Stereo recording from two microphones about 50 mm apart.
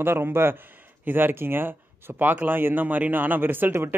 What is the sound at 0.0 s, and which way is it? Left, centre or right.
Speech, right.